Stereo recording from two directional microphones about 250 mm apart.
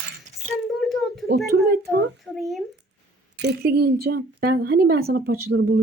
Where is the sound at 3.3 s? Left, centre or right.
Right.